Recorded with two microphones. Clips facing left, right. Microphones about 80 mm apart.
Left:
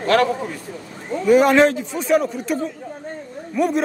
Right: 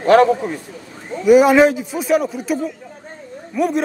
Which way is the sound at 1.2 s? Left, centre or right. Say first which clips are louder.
Right 3 dB; centre.